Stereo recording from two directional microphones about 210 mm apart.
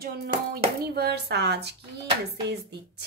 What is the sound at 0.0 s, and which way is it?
Speech, 45° right (ahead or behind).